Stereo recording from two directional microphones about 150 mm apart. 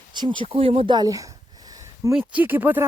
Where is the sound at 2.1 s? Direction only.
10° right (ahead or behind).